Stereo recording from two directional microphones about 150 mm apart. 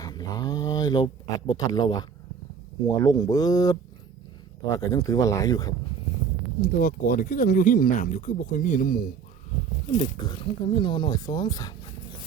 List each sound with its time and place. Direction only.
0.0 s speech: 25° left (ahead or behind)
6.7 s speech: 70° left (ahead or behind)
10.0 s speech: 35° left (ahead or behind)